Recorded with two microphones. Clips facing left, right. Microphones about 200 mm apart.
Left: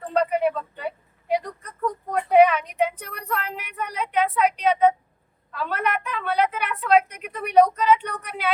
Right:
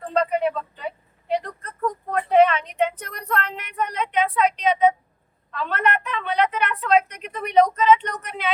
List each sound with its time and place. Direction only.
0.1 s a woman's voice: 10° left (ahead or behind)
1.3 s a sound: 10° left (ahead or behind)
5.5 s a woman's voice: 5° left (ahead or behind)